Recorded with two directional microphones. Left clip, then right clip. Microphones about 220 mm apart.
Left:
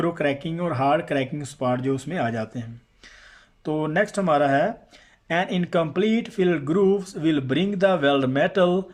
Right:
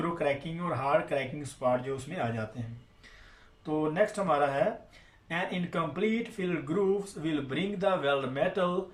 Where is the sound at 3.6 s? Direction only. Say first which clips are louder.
Left 5 dB; 45° left (ahead or behind).